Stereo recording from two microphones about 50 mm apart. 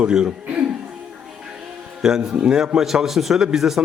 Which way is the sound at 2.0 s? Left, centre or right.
Centre.